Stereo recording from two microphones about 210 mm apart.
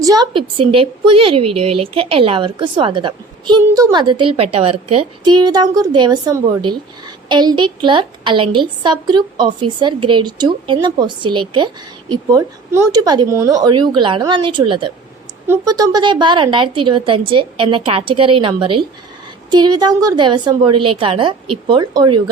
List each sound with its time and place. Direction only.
0.0 s a woman's voice: 20° right (ahead or behind)